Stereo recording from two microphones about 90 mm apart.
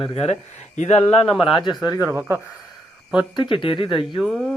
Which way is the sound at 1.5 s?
70° left (ahead or behind).